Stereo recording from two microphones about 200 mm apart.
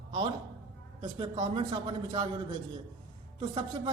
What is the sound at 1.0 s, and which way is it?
A man's voice, 25° right (ahead or behind).